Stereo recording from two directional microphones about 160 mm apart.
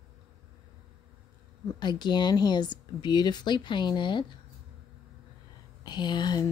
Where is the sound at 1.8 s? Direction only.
30° left (ahead or behind).